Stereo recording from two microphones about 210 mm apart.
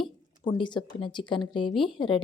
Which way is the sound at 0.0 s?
20° left (ahead or behind).